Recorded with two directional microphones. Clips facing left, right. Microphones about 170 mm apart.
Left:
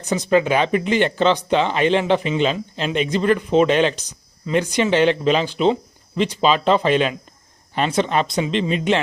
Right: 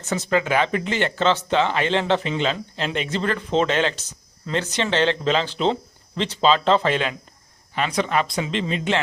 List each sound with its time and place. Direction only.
0.0 s speech: 15° left (ahead or behind)